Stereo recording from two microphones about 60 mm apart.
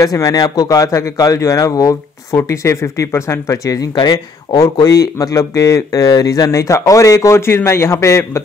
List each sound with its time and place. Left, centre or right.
0.0 s speech: left
2.3 s speech: left
3.6 s speech: left